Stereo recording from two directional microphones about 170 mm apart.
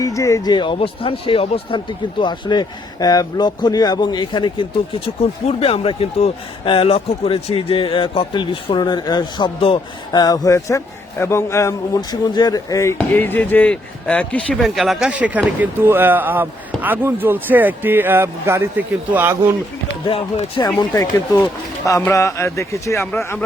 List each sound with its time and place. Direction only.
0.0 s speech: 20° left (ahead or behind); by 19.4 s 10° right (ahead or behind)
20.1 s speech: 35° left (ahead or behind)
20.7 s speech: 20° left (ahead or behind)